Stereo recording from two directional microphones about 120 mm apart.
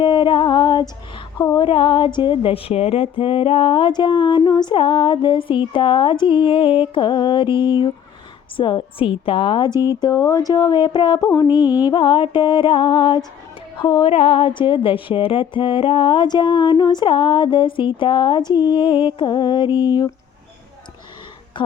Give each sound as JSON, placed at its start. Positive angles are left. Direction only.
{"t": 0.0, "sound": "female singing", "side_deg": 40}
{"t": 1.6, "sound": "music", "side_deg": 45}
{"t": 9.7, "sound": "speech", "side_deg": -25}
{"t": 10.0, "sound": "music", "side_deg": 30}
{"t": 11.9, "sound": "music", "side_deg": 45}
{"t": 14.1, "sound": "music", "side_deg": 50}